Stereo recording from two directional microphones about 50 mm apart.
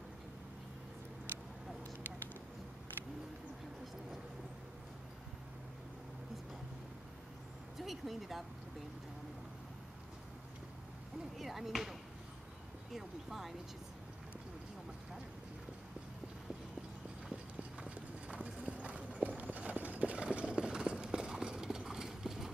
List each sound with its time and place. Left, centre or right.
7.8 s speech: centre
11.3 s speech: centre
17.7 s clip-clop: right